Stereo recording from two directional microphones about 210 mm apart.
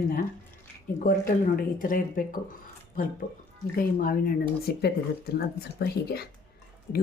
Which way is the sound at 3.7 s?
45° left (ahead or behind).